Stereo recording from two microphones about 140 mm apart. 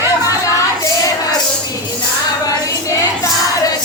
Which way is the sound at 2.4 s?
25° left (ahead or behind).